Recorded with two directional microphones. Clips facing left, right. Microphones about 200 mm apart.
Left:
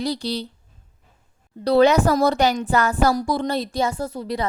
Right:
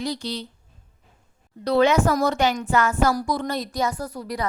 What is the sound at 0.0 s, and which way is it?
Speech, 35° left (ahead or behind).